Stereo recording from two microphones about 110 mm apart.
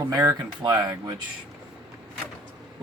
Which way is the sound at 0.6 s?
40° right (ahead or behind).